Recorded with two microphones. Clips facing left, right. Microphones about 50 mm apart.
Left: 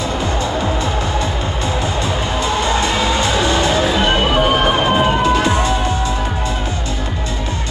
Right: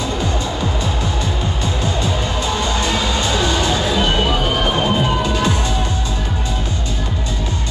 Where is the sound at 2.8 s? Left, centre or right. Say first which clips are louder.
Left 3 dB; left.